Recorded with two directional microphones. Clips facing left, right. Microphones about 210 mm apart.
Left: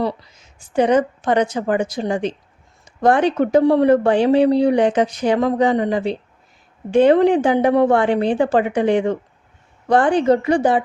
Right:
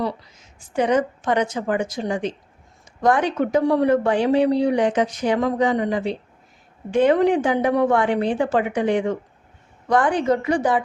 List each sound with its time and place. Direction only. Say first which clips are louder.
0.8 s speech: left 4 dB; 30° left (ahead or behind)